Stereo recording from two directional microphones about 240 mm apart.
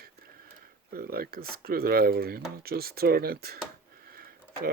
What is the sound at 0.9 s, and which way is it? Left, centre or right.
Speech, right.